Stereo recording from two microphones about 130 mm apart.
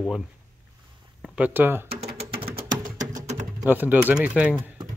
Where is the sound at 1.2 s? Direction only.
10° right (ahead or behind).